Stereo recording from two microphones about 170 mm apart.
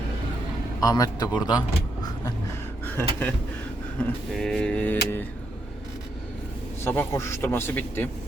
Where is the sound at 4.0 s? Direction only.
5° left (ahead or behind).